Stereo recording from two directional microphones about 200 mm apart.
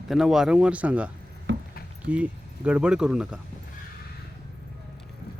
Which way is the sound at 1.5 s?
65° right (ahead or behind).